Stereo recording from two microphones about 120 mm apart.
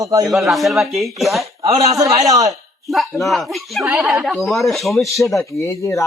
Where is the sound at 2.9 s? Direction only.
Centre (ahead or behind).